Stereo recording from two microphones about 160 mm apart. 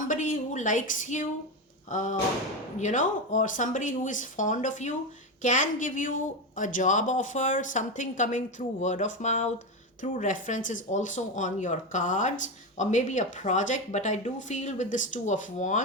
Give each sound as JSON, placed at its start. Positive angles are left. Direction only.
{"t": 0.1, "sound": "a woman's voice", "side_deg": 55}